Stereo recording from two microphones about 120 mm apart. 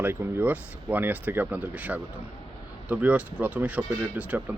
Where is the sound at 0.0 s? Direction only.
15° right (ahead or behind).